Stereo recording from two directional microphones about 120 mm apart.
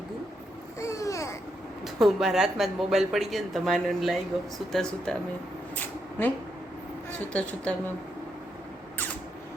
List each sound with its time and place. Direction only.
0.8 s babbling: 25° left (ahead or behind)
1.8 s speech: centre (ahead or behind)
5.7 s a sound: 15° left (ahead or behind)
7.3 s a woman's voice: 10° left (ahead or behind)